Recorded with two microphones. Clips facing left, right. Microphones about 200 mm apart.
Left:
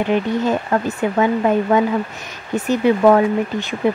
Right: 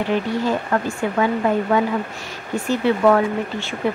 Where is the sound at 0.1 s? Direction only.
20° left (ahead or behind).